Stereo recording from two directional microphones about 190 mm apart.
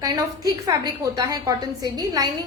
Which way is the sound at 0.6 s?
20° right (ahead or behind).